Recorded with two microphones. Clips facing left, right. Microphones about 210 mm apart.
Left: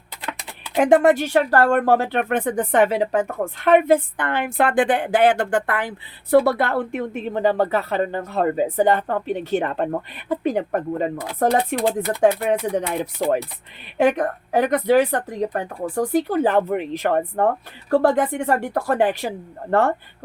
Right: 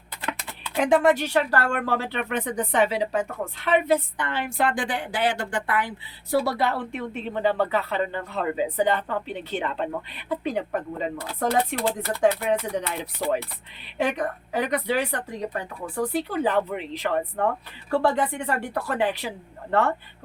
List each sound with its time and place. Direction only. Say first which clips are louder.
0.8 s speech: left 5 dB; 50° left (ahead or behind)
14.0 s speech: left 7 dB; 50° left (ahead or behind)